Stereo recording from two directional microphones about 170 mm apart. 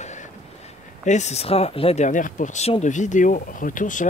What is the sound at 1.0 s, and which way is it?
Speech, 45° left (ahead or behind).